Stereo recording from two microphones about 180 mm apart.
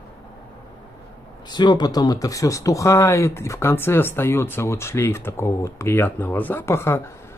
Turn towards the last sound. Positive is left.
turn(degrees=15)  # may be behind; listen again after turning